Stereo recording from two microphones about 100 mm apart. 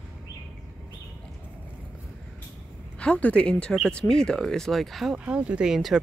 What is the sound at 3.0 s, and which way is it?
Speech, 15° left (ahead or behind).